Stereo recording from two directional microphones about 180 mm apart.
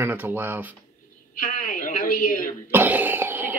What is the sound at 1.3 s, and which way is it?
A woman's voice, 50° left (ahead or behind).